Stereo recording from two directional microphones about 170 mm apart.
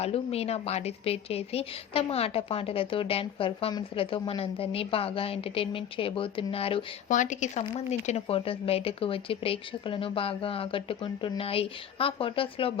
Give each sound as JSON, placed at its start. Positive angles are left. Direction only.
{"t": 0.0, "sound": "a woman's voice", "side_deg": 35}
{"t": 7.1, "sound": "a woman's voice", "side_deg": 45}